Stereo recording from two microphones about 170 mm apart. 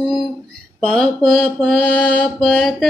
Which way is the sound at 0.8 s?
Centre (ahead or behind).